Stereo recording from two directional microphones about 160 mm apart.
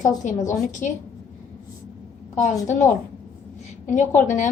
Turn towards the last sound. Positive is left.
turn(degrees=50)  # may be behind; listen again after turning